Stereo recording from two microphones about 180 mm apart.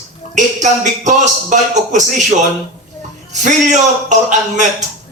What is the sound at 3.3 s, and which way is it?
A man's voice, 40° right (ahead or behind).